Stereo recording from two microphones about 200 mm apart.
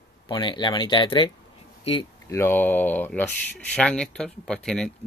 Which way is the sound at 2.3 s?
10° left (ahead or behind).